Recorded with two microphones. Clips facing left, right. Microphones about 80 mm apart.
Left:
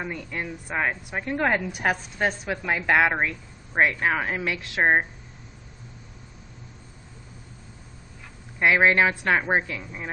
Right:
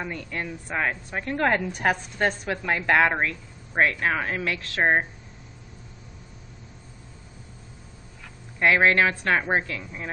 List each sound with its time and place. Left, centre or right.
0.0 s a woman's voice: centre
8.5 s a woman's voice: centre